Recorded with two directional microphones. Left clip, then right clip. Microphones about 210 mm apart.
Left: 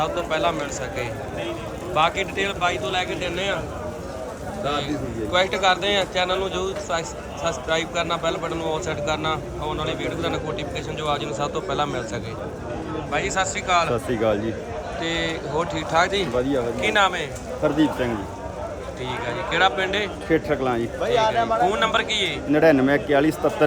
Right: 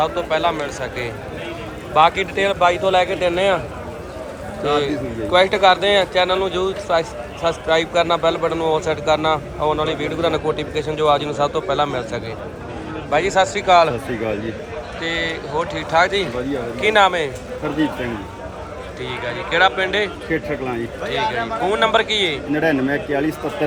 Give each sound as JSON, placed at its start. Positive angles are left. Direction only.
{"t": 0.0, "sound": "a man's voice", "side_deg": 15}
{"t": 5.3, "sound": "a man's voice", "side_deg": 10}
{"t": 15.0, "sound": "a man's voice", "side_deg": 20}
{"t": 19.2, "sound": "a man's voice", "side_deg": 20}
{"t": 21.1, "sound": "a man's voice", "side_deg": 20}
{"t": 22.5, "sound": "a man's voice", "side_deg": 30}